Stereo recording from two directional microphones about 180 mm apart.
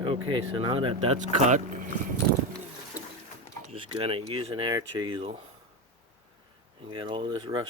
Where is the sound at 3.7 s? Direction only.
30° right (ahead or behind).